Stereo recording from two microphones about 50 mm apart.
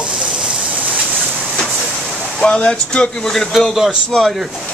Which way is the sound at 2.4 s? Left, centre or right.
Left.